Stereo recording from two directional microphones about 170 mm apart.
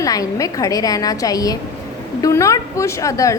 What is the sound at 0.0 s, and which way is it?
A woman's voice, 20° left (ahead or behind).